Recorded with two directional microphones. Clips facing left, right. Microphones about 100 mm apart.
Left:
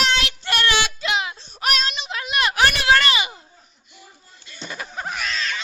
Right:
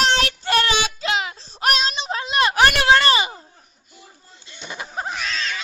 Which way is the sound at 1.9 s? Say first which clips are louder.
Right 3 dB; 35° right (ahead or behind).